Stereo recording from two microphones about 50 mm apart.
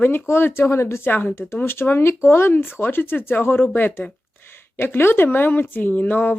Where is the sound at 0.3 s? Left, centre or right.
Left.